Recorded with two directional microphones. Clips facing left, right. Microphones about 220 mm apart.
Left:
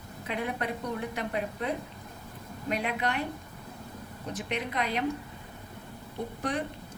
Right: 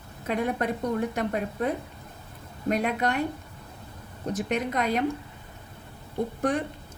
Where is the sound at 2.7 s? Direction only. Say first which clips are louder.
Right 5 dB; 45° right (ahead or behind).